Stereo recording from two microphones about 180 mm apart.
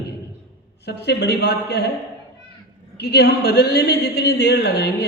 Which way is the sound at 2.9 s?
65° left (ahead or behind).